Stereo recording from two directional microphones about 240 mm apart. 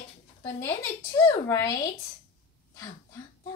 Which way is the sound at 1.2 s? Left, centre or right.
Centre.